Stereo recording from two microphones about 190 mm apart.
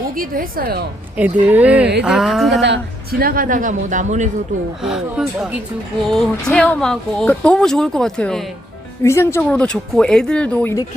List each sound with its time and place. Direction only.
0.2 s speech: 50° right (ahead or behind)
1.1 s speech: 10° right (ahead or behind)
2.6 s speech: 65° right (ahead or behind); by 4.3 s 40° right (ahead or behind)
5.1 s speech: 5° right (ahead or behind)
9.0 s speech: 15° left (ahead or behind)